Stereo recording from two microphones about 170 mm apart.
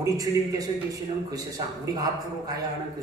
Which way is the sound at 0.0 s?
20° right (ahead or behind).